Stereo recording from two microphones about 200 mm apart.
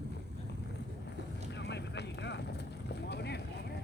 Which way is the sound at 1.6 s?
60° left (ahead or behind).